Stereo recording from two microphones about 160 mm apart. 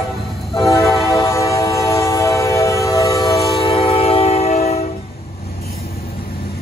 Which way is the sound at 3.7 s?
35° left (ahead or behind).